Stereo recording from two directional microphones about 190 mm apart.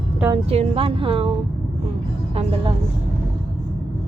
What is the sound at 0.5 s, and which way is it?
Speech, 30° right (ahead or behind).